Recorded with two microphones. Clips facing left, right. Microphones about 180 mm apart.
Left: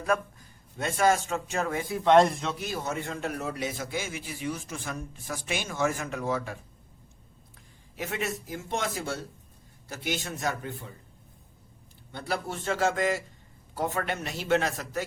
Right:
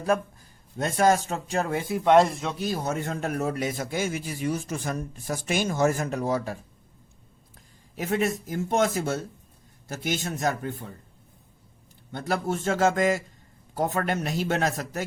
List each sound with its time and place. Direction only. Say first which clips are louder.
0.8 s speech: right 3 dB; 40° right (ahead or behind)
2.0 s a man's voice: right 1 dB; 5° right (ahead or behind)
2.6 s a man's voice: right 4 dB; 35° right (ahead or behind)
7.9 s a man's voice: right 7 dB; 45° right (ahead or behind)
12.1 s a man's voice: right 5 dB; 45° right (ahead or behind)